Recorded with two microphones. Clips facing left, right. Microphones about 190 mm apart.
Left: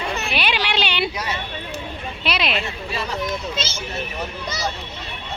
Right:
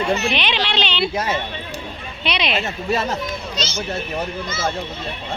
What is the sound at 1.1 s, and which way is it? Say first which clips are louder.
Speech: right 6 dB; 50° right (ahead or behind).